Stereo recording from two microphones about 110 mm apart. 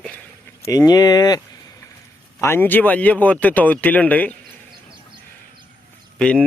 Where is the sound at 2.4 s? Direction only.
20° left (ahead or behind).